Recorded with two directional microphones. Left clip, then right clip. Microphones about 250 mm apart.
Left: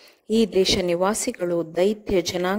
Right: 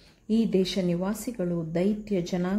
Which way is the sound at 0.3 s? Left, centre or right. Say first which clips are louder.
Left 7 dB; left.